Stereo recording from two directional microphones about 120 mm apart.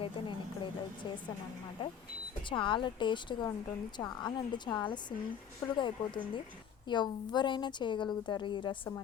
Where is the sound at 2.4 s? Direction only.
45° left (ahead or behind).